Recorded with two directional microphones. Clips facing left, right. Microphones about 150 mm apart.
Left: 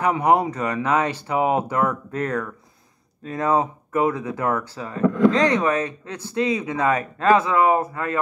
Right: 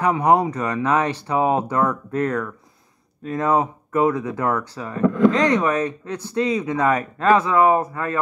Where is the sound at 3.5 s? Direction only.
30° left (ahead or behind).